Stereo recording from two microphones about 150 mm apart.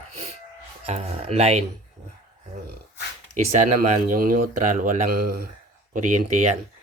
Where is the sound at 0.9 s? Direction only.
45° right (ahead or behind).